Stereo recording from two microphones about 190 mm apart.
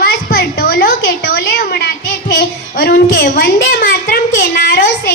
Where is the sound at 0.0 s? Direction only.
50° left (ahead or behind).